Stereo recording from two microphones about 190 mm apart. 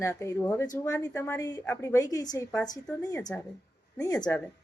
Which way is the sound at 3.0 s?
20° left (ahead or behind).